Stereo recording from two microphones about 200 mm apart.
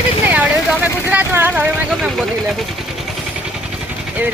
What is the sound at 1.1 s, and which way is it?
Speech, 10° right (ahead or behind).